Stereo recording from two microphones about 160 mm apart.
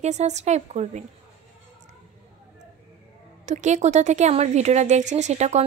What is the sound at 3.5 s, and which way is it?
Speech, 50° right (ahead or behind).